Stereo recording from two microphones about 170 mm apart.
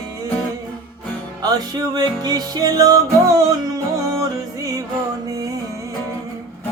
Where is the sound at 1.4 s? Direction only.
25° right (ahead or behind).